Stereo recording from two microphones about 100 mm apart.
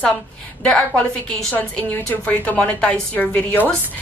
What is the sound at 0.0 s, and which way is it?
A woman's voice, 10° left (ahead or behind).